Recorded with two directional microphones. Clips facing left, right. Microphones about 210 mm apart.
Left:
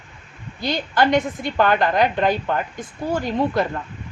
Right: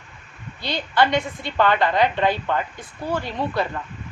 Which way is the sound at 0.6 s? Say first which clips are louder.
Left 1 dB; 45° left (ahead or behind).